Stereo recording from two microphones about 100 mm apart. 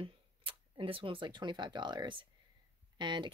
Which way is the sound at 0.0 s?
65° right (ahead or behind).